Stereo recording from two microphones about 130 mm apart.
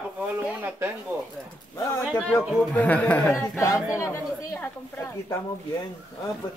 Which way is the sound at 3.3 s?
25° left (ahead or behind).